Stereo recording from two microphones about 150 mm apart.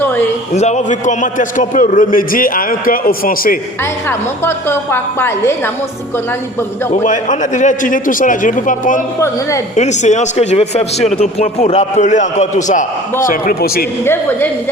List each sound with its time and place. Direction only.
0.5 s a man's voice: 50° left (ahead or behind); by 3.6 s 70° left (ahead or behind)
4.4 s a woman's voice: 15° left (ahead or behind)
6.9 s a man's voice: 55° left (ahead or behind)
13.2 s a man's voice: 70° left (ahead or behind)
14.0 s a woman's voice: 15° left (ahead or behind)